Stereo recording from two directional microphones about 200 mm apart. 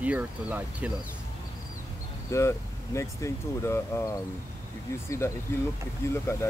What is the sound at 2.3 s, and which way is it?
Speech, 15° left (ahead or behind).